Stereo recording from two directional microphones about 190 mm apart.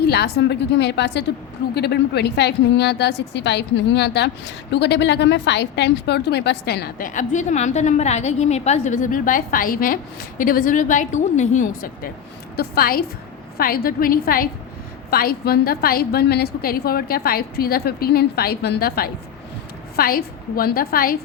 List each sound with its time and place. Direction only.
0.1 s a woman's voice: 60° left (ahead or behind)